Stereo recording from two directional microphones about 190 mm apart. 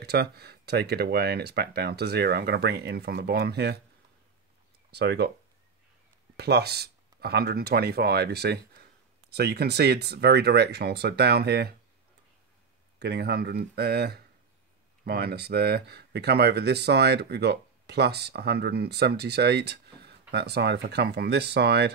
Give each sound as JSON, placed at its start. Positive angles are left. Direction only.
{"t": 0.0, "sound": "speech", "side_deg": -55}
{"t": 4.9, "sound": "speech", "side_deg": -60}
{"t": 6.3, "sound": "speech", "side_deg": -60}
{"t": 13.0, "sound": "speech", "side_deg": -60}